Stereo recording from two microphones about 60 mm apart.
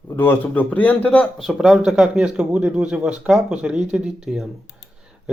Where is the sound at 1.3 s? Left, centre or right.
Centre.